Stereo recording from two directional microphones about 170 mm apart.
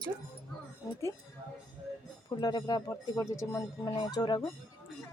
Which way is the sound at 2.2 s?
25° left (ahead or behind).